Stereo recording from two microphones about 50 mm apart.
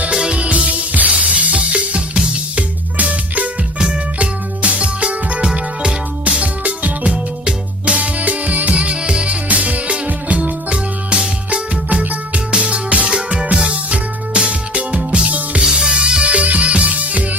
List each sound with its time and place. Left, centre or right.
0.0 s music: right
11.1 s music: centre